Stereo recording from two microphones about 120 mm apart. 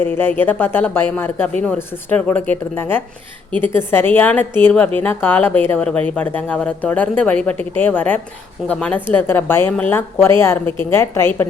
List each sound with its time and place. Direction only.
0.0 s a woman's voice: 15° left (ahead or behind)